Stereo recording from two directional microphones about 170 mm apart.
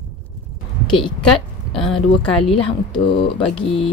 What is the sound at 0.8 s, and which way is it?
Speech, 30° left (ahead or behind).